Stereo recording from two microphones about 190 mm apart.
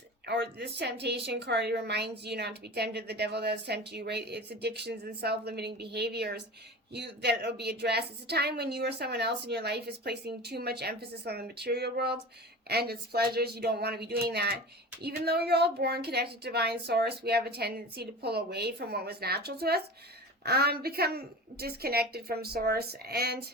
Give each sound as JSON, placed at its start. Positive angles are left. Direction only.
{"t": 0.3, "sound": "a woman's voice", "side_deg": -65}